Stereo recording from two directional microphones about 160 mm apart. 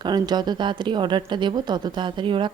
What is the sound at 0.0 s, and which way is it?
A woman's voice, 25° right (ahead or behind).